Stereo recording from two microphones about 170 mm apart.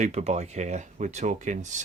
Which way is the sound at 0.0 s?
40° right (ahead or behind).